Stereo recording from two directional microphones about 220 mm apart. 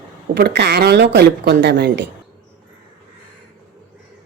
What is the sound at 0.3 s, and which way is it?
A woman's voice, 50° right (ahead or behind).